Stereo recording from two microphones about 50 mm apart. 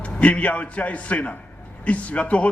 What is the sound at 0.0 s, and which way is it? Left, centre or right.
A man's voice, left.